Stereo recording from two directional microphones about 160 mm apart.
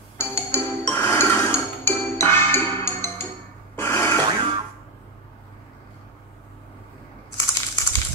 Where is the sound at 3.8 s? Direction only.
15° left (ahead or behind).